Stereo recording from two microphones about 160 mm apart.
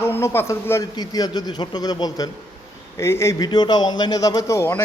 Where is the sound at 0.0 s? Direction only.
15° left (ahead or behind).